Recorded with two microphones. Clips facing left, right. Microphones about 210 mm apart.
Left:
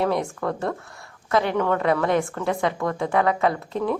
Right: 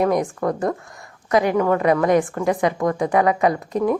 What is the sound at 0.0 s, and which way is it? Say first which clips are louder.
A woman's voice: right 4 dB; 15° right (ahead or behind).